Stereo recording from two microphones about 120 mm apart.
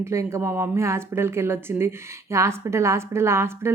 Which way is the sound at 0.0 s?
25° right (ahead or behind).